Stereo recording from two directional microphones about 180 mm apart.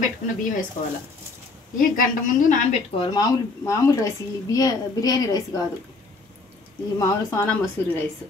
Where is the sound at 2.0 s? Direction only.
45° left (ahead or behind).